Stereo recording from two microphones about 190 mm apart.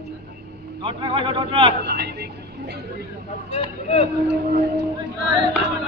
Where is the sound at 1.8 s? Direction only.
60° right (ahead or behind).